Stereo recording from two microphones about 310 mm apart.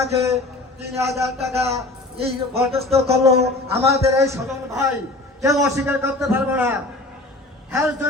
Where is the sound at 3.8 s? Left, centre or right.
Centre.